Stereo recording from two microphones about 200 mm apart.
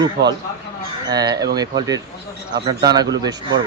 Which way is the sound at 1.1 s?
20° right (ahead or behind).